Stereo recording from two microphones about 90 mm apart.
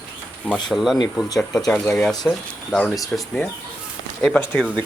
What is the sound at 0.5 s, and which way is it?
Speech, centre (ahead or behind).